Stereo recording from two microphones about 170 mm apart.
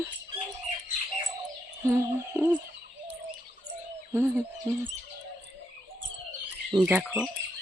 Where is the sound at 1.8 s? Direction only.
15° right (ahead or behind).